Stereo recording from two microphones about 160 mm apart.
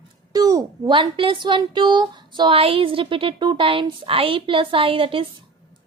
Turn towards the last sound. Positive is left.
turn(degrees=-35)  # may be behind; listen again after turning